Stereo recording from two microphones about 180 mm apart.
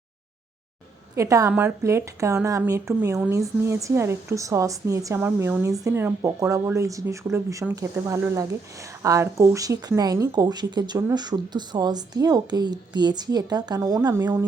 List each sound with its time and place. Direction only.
1.1 s a woman's voice: 15° right (ahead or behind)